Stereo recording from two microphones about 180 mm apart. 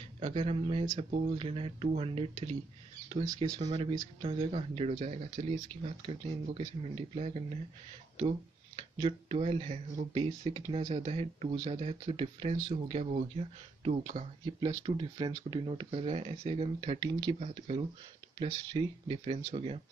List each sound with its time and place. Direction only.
0.4 s speech: 30° right (ahead or behind)
8.9 s speech: 30° right (ahead or behind)
14.4 s speech: 25° right (ahead or behind)
17.4 s speech: 35° right (ahead or behind)